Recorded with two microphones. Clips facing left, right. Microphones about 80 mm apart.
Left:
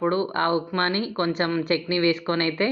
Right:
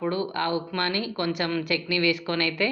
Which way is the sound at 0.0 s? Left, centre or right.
Left.